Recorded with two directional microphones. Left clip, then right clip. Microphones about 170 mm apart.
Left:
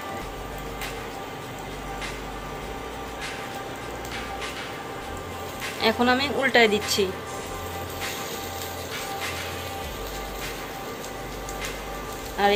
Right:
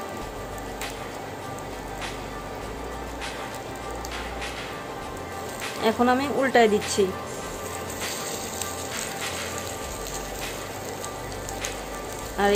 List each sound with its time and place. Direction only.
5.8 s a woman's voice: 20° right (ahead or behind)
12.4 s a woman's voice: 20° right (ahead or behind)